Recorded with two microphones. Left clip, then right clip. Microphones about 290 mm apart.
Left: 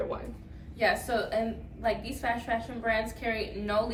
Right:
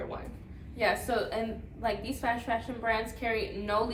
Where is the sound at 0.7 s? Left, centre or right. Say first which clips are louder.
Left 1 dB; centre.